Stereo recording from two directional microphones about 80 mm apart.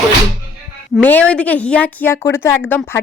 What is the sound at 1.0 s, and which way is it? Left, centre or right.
A woman's voice, centre.